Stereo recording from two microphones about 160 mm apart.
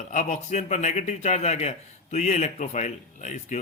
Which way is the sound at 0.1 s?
50° left (ahead or behind).